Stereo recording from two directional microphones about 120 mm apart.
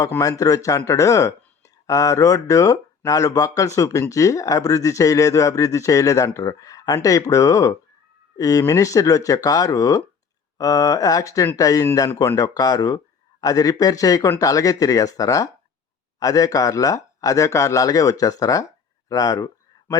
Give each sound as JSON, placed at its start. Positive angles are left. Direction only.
{"t": 0.2, "sound": "speech", "side_deg": 30}